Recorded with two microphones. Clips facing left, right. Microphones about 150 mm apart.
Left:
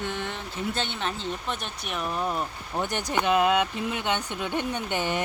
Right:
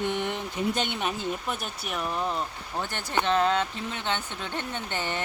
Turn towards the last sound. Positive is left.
turn(degrees=15)  # may be behind; listen again after turning